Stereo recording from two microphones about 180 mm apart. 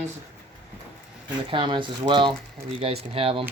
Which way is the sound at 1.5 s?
25° right (ahead or behind).